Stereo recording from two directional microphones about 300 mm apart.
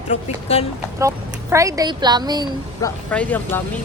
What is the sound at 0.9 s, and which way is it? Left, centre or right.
Speech, centre.